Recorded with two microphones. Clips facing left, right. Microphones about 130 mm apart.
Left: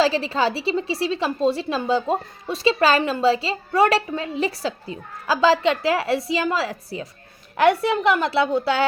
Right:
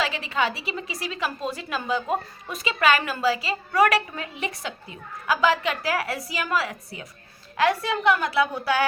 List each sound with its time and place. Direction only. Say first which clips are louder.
0.0 s a woman's voice: left 6 dB; 30° left (ahead or behind)